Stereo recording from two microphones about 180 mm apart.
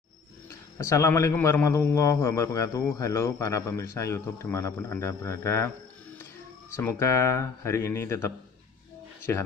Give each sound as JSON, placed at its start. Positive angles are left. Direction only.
{"t": 0.5, "sound": "a man's voice", "side_deg": 15}
{"t": 6.8, "sound": "a man's voice", "side_deg": 15}